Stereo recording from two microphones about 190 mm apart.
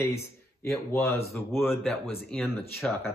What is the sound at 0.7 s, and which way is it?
A man's voice, 15° left (ahead or behind).